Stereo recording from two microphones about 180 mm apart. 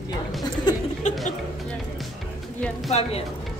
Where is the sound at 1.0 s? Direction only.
40° left (ahead or behind).